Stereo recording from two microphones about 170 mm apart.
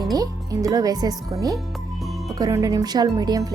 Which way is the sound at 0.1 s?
20° right (ahead or behind).